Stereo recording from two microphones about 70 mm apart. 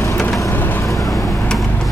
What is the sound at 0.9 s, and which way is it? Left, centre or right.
Vehicle, left.